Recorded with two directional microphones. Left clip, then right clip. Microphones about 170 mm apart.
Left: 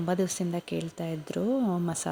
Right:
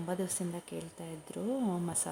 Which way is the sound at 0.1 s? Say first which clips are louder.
Left 8 dB; 30° left (ahead or behind).